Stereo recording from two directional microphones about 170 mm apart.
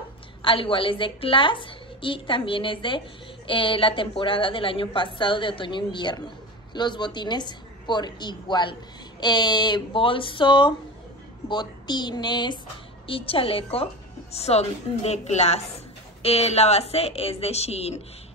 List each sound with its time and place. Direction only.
0.4 s a woman's voice: 30° left (ahead or behind)